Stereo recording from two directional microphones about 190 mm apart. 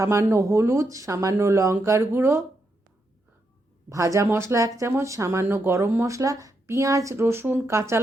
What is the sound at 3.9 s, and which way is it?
Speech, 15° right (ahead or behind).